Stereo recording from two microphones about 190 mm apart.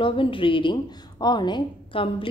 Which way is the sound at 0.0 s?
25° left (ahead or behind).